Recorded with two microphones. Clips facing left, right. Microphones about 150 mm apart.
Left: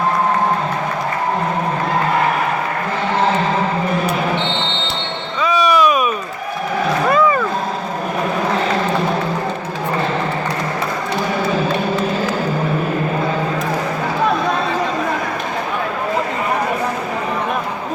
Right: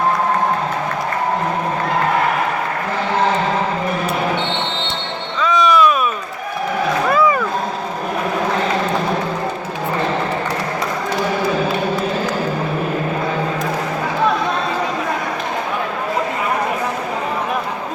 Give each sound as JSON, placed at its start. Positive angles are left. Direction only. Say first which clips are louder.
{"t": 5.4, "sound": "music", "louder": "even", "side_deg": 10}